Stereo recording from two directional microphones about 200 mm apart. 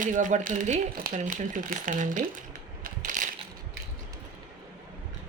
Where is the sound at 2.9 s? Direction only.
40° right (ahead or behind).